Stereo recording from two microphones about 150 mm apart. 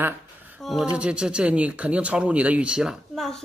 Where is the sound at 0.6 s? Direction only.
Centre (ahead or behind).